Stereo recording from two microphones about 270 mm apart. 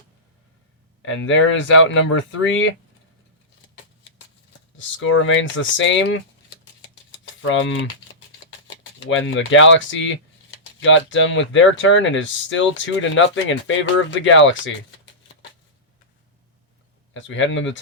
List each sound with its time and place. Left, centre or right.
1.0 s speech: left
4.8 s speech: left
7.4 s speech: left
17.2 s speech: left